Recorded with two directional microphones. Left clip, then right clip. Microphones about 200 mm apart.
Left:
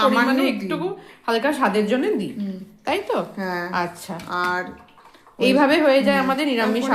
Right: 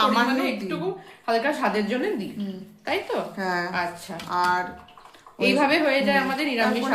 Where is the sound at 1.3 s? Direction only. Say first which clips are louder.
Left 3 dB; 30° left (ahead or behind).